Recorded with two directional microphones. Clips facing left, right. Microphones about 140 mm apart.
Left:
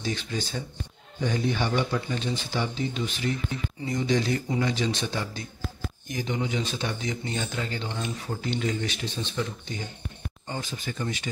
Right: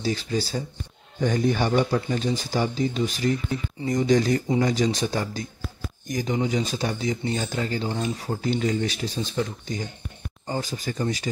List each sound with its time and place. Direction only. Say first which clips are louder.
0.0 s speech: right 5 dB; 35° right (ahead or behind)
1.2 s speech: right 4 dB; 45° right (ahead or behind)